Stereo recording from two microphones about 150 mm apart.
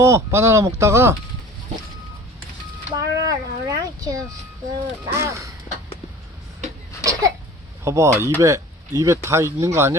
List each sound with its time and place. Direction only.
0.0 s speech: 20° right (ahead or behind)
2.9 s speech: 25° right (ahead or behind)
7.0 s cough: 20° right (ahead or behind)
7.9 s speech: 20° right (ahead or behind)